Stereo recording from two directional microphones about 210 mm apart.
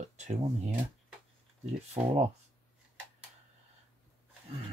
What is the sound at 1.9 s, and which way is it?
Speech, 30° right (ahead or behind).